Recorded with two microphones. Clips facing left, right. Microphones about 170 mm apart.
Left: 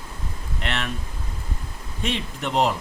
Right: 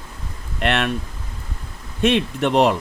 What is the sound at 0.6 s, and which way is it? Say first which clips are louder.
Speech: right 9 dB; 65° right (ahead or behind).